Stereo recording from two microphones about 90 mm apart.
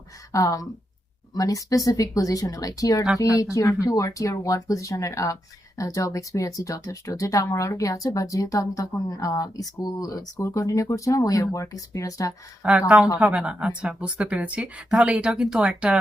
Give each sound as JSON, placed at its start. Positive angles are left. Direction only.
{"t": 0.3, "sound": "speech", "side_deg": 40}
{"t": 12.6, "sound": "speech", "side_deg": -10}